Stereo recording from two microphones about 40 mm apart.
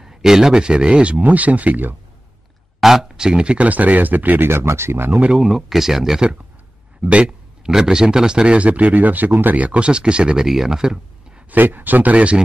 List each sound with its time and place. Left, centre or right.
0.0 s speech: centre
1.0 s speech: right
2.8 s speech: centre
3.2 s speech: centre
3.5 s speech: right
4.5 s speech: right
5.4 s speech: centre
7.0 s speech: right
7.6 s speech: centre
8.5 s speech: right
9.8 s speech: right
11.5 s speech: right